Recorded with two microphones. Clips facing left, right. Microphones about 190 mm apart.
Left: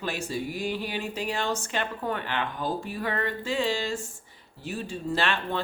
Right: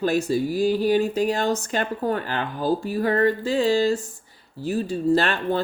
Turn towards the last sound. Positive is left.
turn(degrees=-40)  # may be behind; listen again after turning